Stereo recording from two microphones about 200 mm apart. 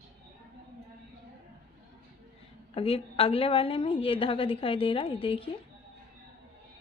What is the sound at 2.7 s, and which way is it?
A woman's voice, 30° left (ahead or behind).